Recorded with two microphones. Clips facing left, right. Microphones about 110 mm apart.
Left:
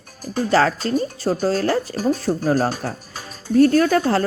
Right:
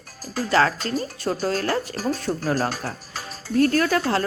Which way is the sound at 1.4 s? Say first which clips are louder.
Left 4 dB; 35° left (ahead or behind).